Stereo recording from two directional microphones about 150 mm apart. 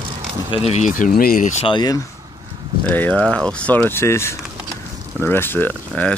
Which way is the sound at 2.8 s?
10° left (ahead or behind).